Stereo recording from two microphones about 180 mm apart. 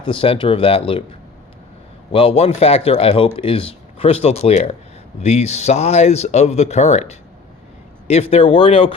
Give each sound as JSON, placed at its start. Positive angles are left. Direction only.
{"t": 0.0, "sound": "speech", "side_deg": 30}
{"t": 2.1, "sound": "speech", "side_deg": 35}